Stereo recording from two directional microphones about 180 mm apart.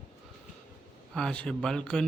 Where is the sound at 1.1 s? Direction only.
5° left (ahead or behind).